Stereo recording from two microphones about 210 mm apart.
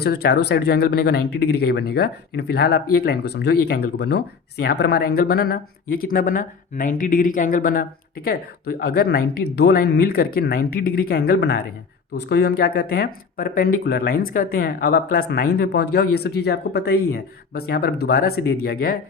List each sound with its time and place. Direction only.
0.0 s speech: 50° left (ahead or behind)